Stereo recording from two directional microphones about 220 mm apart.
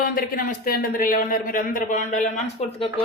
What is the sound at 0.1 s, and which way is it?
A man's voice, 40° left (ahead or behind).